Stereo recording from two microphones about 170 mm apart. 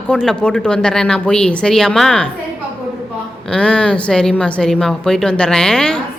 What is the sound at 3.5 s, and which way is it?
A woman's voice, 5° left (ahead or behind).